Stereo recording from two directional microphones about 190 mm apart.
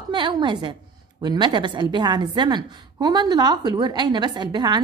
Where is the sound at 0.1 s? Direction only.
25° right (ahead or behind).